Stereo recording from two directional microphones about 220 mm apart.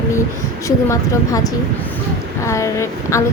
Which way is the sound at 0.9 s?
15° left (ahead or behind).